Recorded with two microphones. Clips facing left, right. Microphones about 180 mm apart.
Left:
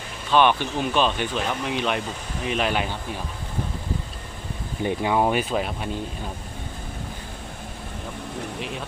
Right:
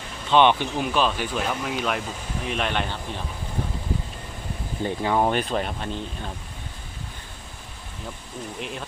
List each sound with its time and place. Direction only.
0.3 s speech: 20° right (ahead or behind)
0.8 s speech: 5° right (ahead or behind)
4.8 s speech: 15° left (ahead or behind)
5.2 s speech: 5° left (ahead or behind)